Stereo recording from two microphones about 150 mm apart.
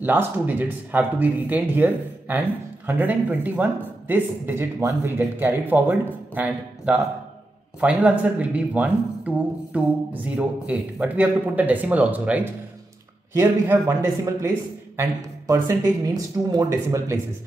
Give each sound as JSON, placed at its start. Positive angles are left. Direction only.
{"t": 0.0, "sound": "speech", "side_deg": -15}